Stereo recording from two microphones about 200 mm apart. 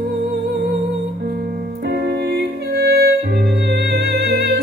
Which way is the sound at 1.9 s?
55° right (ahead or behind).